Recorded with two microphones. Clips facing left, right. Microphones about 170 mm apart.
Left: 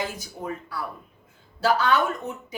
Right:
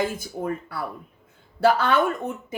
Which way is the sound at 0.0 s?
55° right (ahead or behind).